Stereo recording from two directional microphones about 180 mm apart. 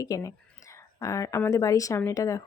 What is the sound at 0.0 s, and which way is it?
Speech, 20° left (ahead or behind).